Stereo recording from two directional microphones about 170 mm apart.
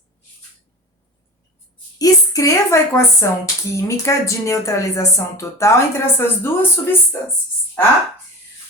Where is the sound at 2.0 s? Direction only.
20° left (ahead or behind).